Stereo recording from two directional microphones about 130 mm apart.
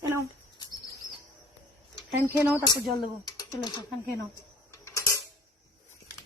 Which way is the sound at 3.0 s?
30° left (ahead or behind).